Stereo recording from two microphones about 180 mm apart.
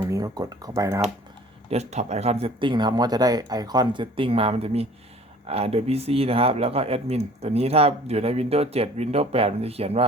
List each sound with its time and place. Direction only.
0.0 s speech: 20° right (ahead or behind)
1.7 s speech: 40° right (ahead or behind)